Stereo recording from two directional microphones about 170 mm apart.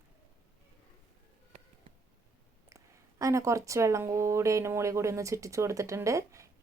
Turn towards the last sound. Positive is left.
turn(degrees=-20)  # may be behind; listen again after turning